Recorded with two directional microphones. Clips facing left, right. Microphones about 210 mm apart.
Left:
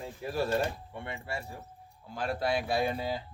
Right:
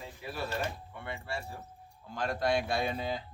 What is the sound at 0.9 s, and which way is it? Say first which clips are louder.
Speech: left 1 dB; 25° left (ahead or behind).